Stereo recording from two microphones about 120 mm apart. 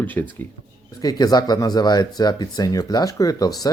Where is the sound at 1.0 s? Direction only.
30° left (ahead or behind).